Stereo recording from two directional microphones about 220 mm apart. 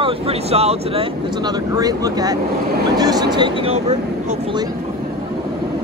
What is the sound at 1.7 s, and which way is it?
Speech, 15° right (ahead or behind).